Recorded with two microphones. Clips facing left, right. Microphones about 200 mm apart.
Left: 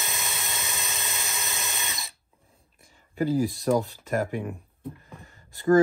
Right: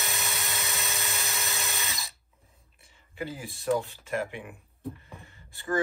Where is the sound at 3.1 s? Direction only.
35° left (ahead or behind).